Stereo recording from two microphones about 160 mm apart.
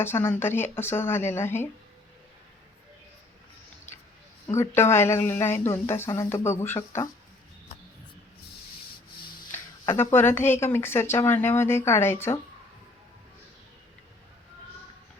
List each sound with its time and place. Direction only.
0.0 s speech: 15° left (ahead or behind)
4.5 s speech: 15° left (ahead or behind)
9.5 s speech: 15° left (ahead or behind)